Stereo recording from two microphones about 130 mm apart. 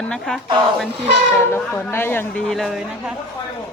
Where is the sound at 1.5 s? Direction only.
15° left (ahead or behind).